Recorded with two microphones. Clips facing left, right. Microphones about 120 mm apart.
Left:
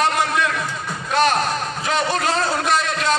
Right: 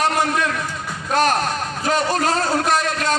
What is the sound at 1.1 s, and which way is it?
A man's voice, 45° right (ahead or behind).